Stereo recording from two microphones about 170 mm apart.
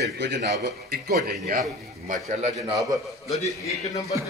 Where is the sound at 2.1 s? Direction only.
40° right (ahead or behind).